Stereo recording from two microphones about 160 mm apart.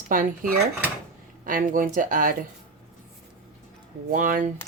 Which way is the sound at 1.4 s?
55° right (ahead or behind).